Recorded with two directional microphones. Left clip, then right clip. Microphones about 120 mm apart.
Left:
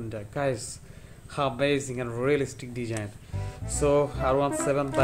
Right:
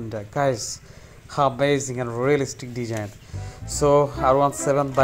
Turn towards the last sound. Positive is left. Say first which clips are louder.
# right 4 dB
turn(degrees=-25)  # may be behind; listen again after turning